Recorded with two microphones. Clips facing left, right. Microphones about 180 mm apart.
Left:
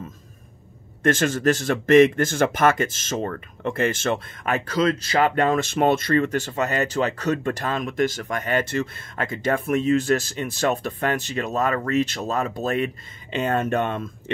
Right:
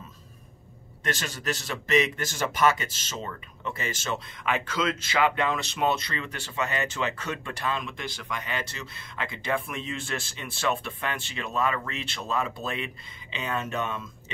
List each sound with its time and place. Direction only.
1.0 s speech: 50° left (ahead or behind)